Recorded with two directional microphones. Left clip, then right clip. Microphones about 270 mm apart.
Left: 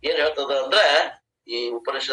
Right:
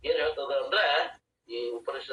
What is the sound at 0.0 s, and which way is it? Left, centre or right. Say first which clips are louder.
A man's voice: left 6 dB; left.